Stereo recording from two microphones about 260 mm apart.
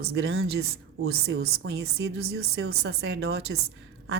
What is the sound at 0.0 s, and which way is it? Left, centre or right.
Speech, right.